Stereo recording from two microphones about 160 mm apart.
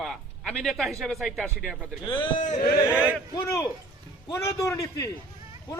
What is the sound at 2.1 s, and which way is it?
Speech, 30° left (ahead or behind).